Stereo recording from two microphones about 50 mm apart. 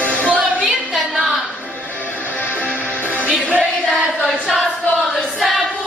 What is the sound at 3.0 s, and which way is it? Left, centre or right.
Music, right.